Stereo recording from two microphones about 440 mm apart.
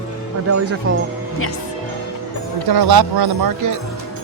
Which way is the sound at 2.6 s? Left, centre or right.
Right.